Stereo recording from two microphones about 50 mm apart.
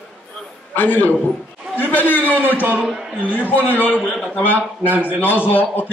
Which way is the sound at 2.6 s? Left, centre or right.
Right.